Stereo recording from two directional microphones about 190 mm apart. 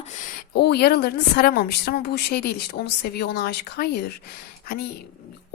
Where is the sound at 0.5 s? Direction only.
60° left (ahead or behind).